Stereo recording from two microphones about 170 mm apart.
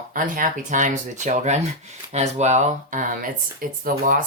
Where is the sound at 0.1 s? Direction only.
55° right (ahead or behind).